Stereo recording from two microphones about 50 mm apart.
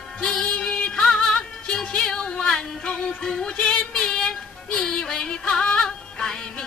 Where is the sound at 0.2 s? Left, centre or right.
Centre.